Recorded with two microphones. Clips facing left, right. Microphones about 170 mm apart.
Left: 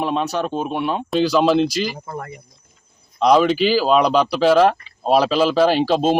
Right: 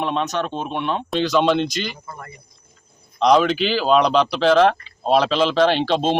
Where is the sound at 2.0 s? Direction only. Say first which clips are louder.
Left 7 dB; 60° left (ahead or behind).